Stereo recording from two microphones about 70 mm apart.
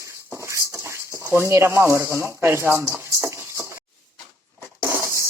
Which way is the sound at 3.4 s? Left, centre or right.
Right.